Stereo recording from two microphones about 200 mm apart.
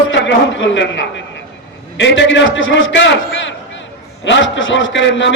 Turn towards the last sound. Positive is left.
turn(degrees=65)  # may be behind; listen again after turning